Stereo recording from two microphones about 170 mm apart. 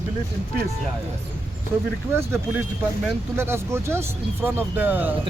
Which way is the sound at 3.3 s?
15° right (ahead or behind).